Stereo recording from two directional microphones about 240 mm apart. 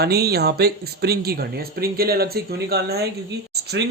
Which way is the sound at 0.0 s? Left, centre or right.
Right.